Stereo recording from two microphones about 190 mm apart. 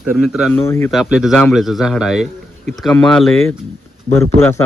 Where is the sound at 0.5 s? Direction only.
15° left (ahead or behind).